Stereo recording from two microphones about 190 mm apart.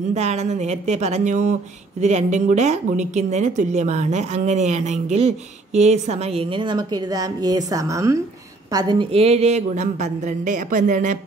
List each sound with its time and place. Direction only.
0.1 s speech: 35° right (ahead or behind); by 8.2 s 15° right (ahead or behind)
8.7 s speech: 25° right (ahead or behind)